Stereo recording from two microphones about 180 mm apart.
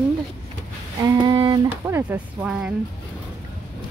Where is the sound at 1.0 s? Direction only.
25° right (ahead or behind).